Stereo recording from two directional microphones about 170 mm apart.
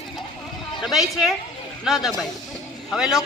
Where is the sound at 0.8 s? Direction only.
Centre (ahead or behind).